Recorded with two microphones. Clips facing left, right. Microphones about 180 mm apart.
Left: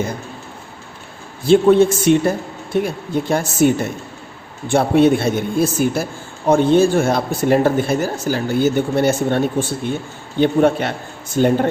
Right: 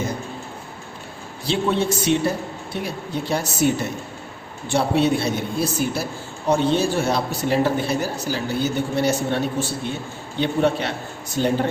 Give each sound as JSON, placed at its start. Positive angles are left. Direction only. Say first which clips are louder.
{"t": 1.5, "sound": "speech", "louder": "left 10 dB", "side_deg": 50}
{"t": 4.7, "sound": "speech", "louder": "left 6 dB", "side_deg": 50}